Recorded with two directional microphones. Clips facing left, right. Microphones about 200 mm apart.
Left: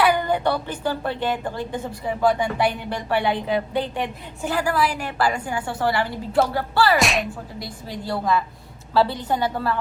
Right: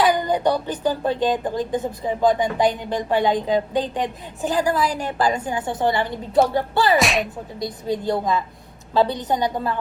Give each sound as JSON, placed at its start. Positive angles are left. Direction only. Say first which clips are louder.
{"t": 0.0, "sound": "a woman's voice", "louder": "right 1 dB", "side_deg": -15}
{"t": 7.0, "sound": "speech", "louder": "right 1 dB", "side_deg": 0}
{"t": 7.6, "sound": "a woman's voice", "louder": "right 11 dB", "side_deg": -20}